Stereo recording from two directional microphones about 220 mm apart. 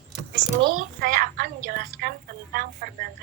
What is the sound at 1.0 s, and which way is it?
A woman's voice, 40° right (ahead or behind).